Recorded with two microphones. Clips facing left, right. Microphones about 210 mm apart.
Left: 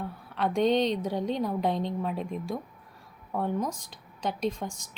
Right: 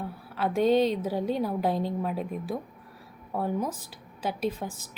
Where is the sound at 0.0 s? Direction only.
5° right (ahead or behind).